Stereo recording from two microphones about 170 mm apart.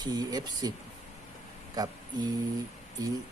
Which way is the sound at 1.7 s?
25° right (ahead or behind).